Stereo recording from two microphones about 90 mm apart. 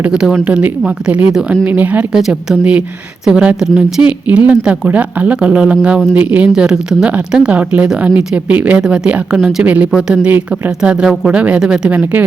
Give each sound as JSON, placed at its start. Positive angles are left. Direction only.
{"t": 0.0, "sound": "speech", "side_deg": -10}
{"t": 1.6, "sound": "speech", "side_deg": -20}
{"t": 2.1, "sound": "speech", "side_deg": -5}